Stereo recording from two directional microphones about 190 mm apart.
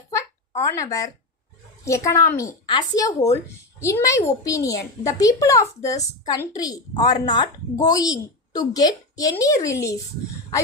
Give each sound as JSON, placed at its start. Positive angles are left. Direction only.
{"t": 0.6, "sound": "a child's voice", "side_deg": 15}